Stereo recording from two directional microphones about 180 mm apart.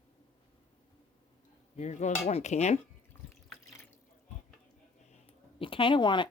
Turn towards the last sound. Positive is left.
turn(degrees=25)  # may be behind; listen again after turning